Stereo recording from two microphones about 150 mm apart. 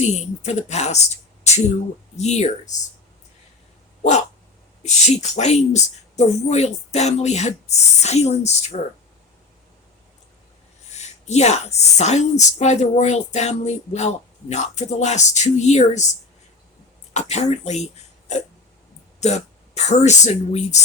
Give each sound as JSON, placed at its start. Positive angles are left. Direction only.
{"t": 0.0, "sound": "a woman's voice", "side_deg": 50}
{"t": 4.0, "sound": "dog", "side_deg": 55}
{"t": 4.8, "sound": "a woman's voice", "side_deg": 50}
{"t": 10.9, "sound": "a woman's voice", "side_deg": 50}
{"t": 17.2, "sound": "a woman's voice", "side_deg": 50}